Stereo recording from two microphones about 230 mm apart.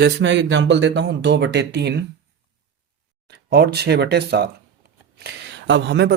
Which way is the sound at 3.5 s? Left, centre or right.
Right.